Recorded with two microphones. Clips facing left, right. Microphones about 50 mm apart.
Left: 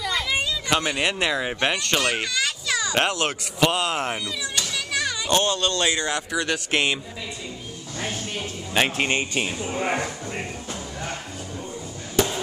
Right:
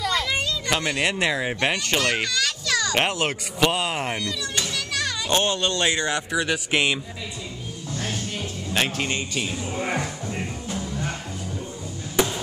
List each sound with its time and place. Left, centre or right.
0.0 s children playing: centre
1.3 s speech: centre
2.0 s children playing: centre
3.5 s speech: centre
4.1 s speech: centre
4.7 s children playing: centre
5.3 s speech: right
6.1 s speech: centre
8.4 s music: centre
8.9 s speech: left